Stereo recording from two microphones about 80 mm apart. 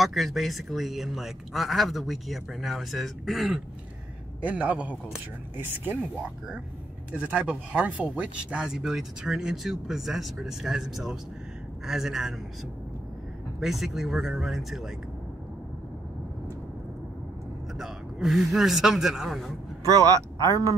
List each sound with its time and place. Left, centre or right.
0.0 s speech: centre
4.4 s a man's voice: centre
7.1 s speech: centre
13.6 s speech: centre
17.7 s speech: centre
20.1 s speech: right